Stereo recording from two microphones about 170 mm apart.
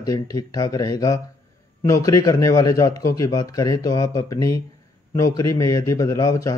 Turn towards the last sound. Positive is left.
turn(degrees=20)  # may be behind; listen again after turning